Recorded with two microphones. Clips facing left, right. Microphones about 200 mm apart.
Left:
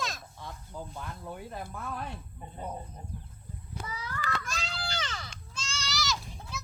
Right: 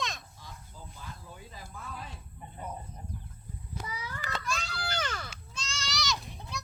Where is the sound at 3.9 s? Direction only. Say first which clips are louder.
Left 5 dB; 15° right (ahead or behind).